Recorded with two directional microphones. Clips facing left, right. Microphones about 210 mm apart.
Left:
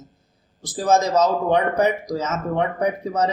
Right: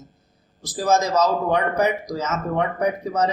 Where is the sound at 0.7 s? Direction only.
25° left (ahead or behind).